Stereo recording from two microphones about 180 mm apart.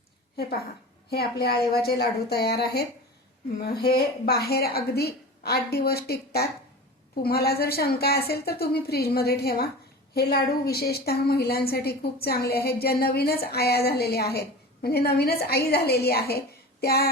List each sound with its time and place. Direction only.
1.1 s a woman's voice: 60° left (ahead or behind)